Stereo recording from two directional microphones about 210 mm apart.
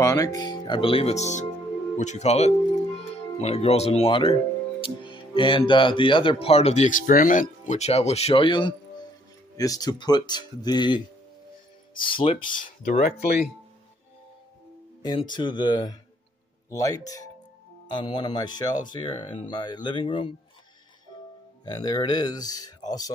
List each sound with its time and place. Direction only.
0.0 s speech: 15° left (ahead or behind)
12.0 s speech: 25° left (ahead or behind)
12.8 s speech: 40° left (ahead or behind)
15.0 s speech: 20° left (ahead or behind)
21.1 s music: 20° left (ahead or behind)
21.6 s speech: 20° left (ahead or behind)